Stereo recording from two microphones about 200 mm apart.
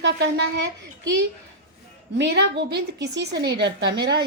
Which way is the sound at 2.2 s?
60° right (ahead or behind).